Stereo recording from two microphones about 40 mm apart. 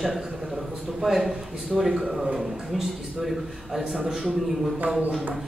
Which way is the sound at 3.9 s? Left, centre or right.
Centre.